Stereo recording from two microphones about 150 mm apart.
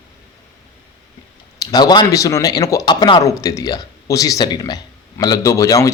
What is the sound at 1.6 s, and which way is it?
A man's voice, 25° left (ahead or behind).